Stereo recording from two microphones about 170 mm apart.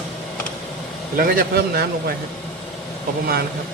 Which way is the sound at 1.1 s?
55° right (ahead or behind).